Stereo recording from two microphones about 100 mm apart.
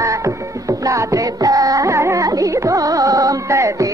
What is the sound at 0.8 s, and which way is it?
Music, 35° right (ahead or behind).